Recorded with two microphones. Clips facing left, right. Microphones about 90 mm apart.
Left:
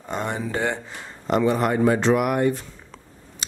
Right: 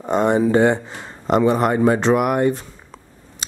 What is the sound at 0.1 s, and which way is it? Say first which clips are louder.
Speech: right 11 dB; 25° right (ahead or behind).